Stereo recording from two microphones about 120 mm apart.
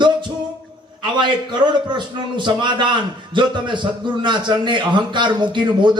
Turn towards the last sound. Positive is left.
turn(degrees=-40)  # may be behind; listen again after turning